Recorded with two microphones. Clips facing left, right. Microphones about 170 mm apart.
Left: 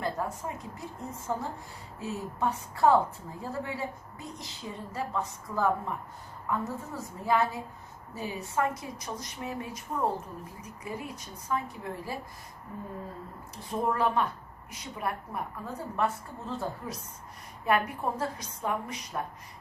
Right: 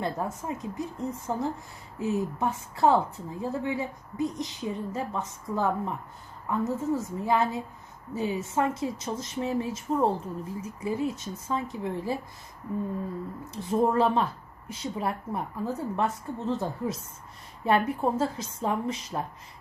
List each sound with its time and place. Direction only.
0.0 s a woman's voice: 20° right (ahead or behind)
13.4 s a woman's voice: 20° right (ahead or behind)